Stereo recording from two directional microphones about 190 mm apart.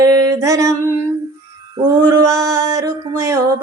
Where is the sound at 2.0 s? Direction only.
20° right (ahead or behind).